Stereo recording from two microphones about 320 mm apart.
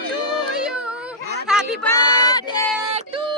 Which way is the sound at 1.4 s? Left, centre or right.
Centre.